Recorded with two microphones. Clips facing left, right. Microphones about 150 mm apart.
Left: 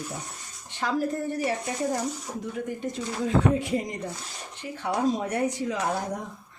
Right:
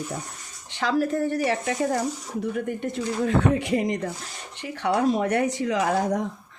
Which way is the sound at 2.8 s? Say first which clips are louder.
Right 4 dB; 65° right (ahead or behind).